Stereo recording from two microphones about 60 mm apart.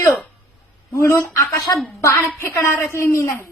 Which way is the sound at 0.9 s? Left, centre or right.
Left.